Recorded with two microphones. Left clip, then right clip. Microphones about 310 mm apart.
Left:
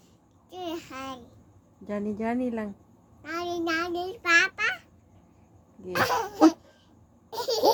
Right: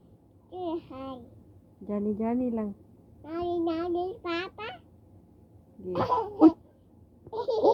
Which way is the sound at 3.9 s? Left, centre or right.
Left.